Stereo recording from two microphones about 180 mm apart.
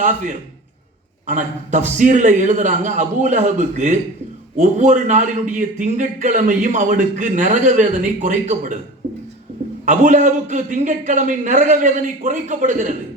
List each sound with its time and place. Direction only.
1.3 s a man's voice: 45° right (ahead or behind)
9.8 s a man's voice: 45° right (ahead or behind)